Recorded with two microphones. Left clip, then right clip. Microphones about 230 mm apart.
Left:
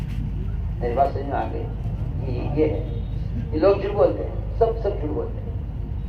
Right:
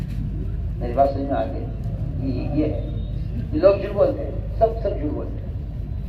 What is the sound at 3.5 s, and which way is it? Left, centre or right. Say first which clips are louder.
Speech: right 2 dB; left.